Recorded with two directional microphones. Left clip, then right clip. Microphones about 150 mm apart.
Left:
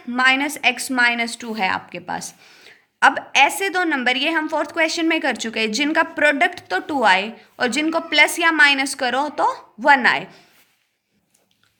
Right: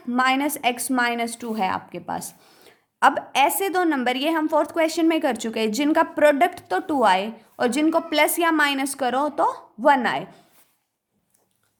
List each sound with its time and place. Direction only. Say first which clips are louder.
0.0 s a woman's voice: left 4 dB; 55° right (ahead or behind); by 10.4 s 40° right (ahead or behind)